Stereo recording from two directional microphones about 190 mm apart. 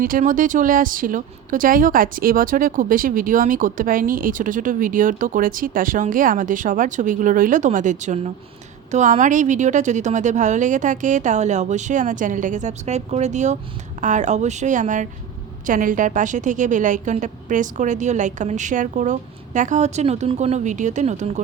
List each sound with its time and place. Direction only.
0.0 s a woman's voice: 45° right (ahead or behind)